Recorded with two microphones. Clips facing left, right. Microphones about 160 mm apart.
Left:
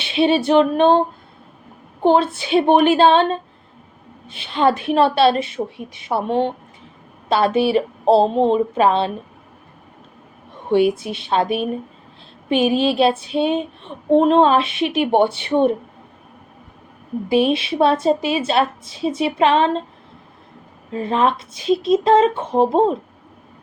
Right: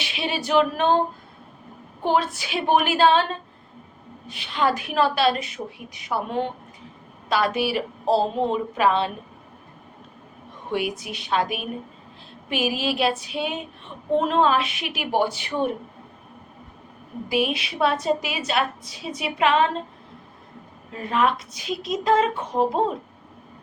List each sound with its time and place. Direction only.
0.0 s a woman's voice: 25° left (ahead or behind)
2.0 s a woman's voice: 30° left (ahead or behind)
10.7 s a woman's voice: 30° left (ahead or behind)
17.2 s a woman's voice: 25° left (ahead or behind)
20.9 s a woman's voice: 25° left (ahead or behind)